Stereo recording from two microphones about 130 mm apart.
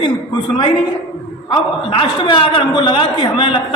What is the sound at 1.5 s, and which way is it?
A man's voice, 35° left (ahead or behind).